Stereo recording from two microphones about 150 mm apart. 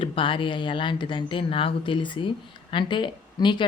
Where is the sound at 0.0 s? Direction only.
35° left (ahead or behind).